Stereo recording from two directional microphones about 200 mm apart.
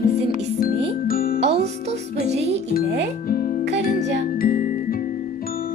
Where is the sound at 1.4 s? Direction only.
30° right (ahead or behind).